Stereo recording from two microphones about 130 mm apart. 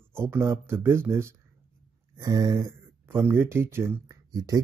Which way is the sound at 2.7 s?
20° right (ahead or behind).